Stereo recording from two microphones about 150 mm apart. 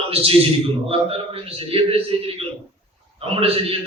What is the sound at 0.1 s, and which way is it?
A man's voice, 40° right (ahead or behind).